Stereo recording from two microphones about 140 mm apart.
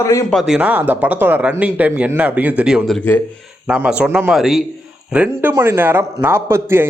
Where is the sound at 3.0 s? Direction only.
15° left (ahead or behind).